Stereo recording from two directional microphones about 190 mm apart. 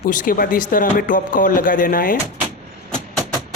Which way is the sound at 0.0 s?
45° left (ahead or behind).